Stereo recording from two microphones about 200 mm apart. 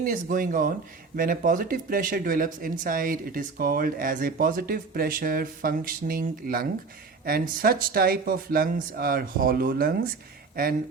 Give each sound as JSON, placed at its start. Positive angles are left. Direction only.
{"t": 0.0, "sound": "speech", "side_deg": -45}